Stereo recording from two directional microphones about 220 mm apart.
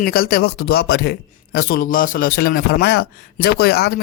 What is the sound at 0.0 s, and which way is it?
A man's voice, 40° left (ahead or behind).